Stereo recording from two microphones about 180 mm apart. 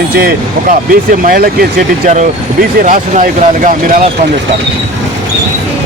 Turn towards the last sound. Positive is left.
turn(degrees=-45)  # may be behind; listen again after turning